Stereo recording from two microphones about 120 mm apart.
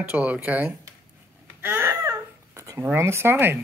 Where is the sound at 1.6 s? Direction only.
20° right (ahead or behind).